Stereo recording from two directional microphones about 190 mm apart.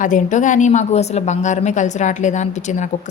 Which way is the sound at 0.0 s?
40° left (ahead or behind).